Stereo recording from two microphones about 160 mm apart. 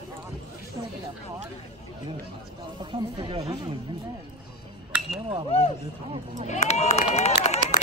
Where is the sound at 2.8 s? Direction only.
30° right (ahead or behind).